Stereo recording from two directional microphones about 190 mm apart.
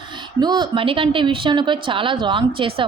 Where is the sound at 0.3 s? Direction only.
20° right (ahead or behind).